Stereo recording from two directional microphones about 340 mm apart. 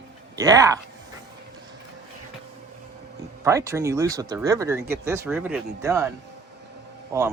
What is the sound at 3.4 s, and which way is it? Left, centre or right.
Speech, centre.